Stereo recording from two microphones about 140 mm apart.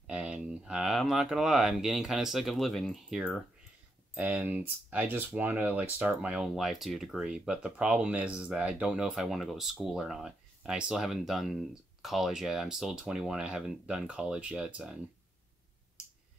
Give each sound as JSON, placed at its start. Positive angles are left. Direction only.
{"t": 0.0, "sound": "speech", "side_deg": -5}
{"t": 4.1, "sound": "speech", "side_deg": -10}